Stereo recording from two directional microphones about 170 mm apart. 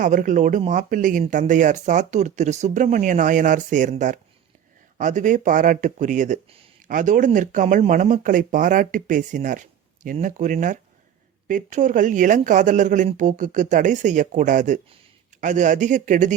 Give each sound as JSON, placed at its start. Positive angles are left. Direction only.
{"t": 0.0, "sound": "speech", "side_deg": -50}
{"t": 6.8, "sound": "speech", "side_deg": -50}